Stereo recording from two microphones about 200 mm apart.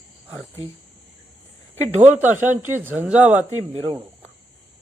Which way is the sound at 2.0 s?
10° right (ahead or behind).